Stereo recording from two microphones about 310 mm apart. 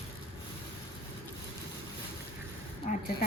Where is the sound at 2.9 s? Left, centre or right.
Left.